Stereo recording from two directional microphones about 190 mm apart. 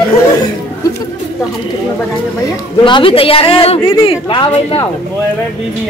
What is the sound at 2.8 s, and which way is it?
A woman's voice, 25° left (ahead or behind).